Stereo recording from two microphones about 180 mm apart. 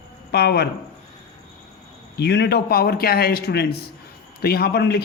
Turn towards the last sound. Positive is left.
turn(degrees=65)  # may be behind; listen again after turning